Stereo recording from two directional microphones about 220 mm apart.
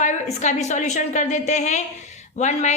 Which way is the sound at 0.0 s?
30° left (ahead or behind).